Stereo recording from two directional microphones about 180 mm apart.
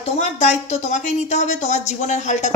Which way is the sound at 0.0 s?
40° left (ahead or behind).